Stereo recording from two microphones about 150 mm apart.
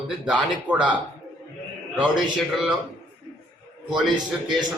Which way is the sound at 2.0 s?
Centre (ahead or behind).